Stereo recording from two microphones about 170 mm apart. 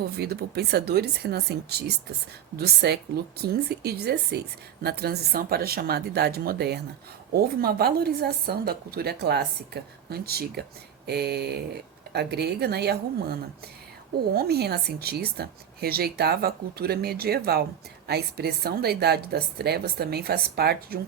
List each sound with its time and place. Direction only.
0.2 s a woman's voice: 70° right (ahead or behind)
14.3 s a woman's voice: 70° right (ahead or behind)